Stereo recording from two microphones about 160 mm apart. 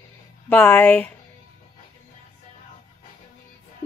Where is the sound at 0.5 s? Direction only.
10° left (ahead or behind).